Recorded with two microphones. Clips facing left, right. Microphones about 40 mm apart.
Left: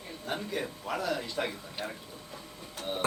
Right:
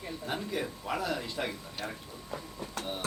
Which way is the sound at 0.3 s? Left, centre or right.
Centre.